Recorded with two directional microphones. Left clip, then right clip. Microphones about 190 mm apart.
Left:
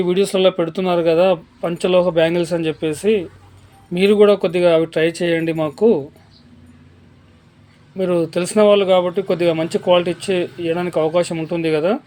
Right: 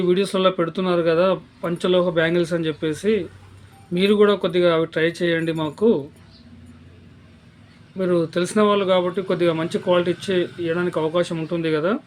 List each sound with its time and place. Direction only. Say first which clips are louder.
0.0 s speech: left 3 dB; 15° left (ahead or behind)
7.9 s speech: left 3 dB; 15° left (ahead or behind)